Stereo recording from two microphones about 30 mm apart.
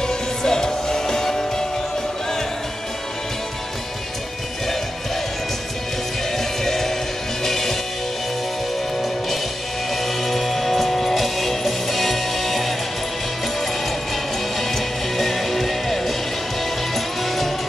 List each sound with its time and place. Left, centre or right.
0.0 s music: centre
6.3 s music: centre
10.0 s music: centre
14.6 s music: centre